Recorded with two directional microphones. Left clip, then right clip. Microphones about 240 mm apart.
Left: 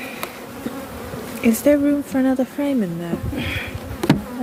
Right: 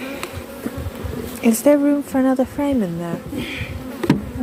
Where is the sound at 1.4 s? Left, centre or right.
Centre.